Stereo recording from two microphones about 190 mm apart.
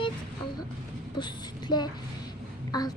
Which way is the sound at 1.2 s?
20° left (ahead or behind).